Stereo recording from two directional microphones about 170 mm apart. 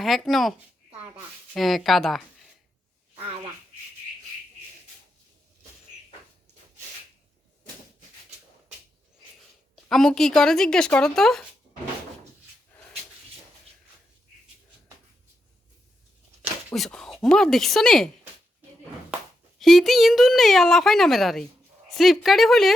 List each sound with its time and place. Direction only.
0.0 s speech: centre (ahead or behind)
9.7 s speech: centre (ahead or behind)
16.7 s speech: centre (ahead or behind)
19.5 s speech: centre (ahead or behind)